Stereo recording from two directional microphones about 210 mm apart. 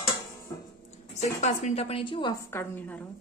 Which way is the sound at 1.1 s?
30° left (ahead or behind).